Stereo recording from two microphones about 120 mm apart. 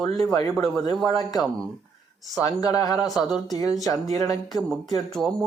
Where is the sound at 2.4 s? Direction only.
30° left (ahead or behind).